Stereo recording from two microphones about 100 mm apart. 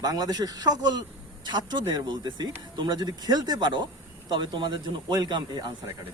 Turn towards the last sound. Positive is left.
turn(degrees=-45)  # may be behind; listen again after turning